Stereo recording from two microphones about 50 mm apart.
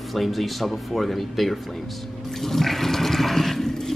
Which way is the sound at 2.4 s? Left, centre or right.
Centre.